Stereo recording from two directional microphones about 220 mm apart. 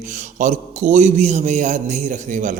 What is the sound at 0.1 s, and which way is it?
A man's voice, 35° right (ahead or behind).